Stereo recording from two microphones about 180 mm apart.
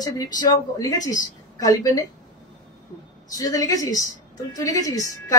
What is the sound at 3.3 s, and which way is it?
Speech, 20° left (ahead or behind).